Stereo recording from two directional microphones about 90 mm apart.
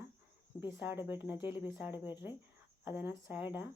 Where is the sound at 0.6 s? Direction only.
25° right (ahead or behind).